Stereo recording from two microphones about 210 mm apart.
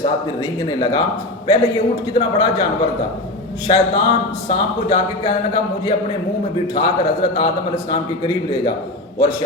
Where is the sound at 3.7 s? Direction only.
25° left (ahead or behind).